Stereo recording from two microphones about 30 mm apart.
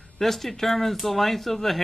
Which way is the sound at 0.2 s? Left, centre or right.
Centre.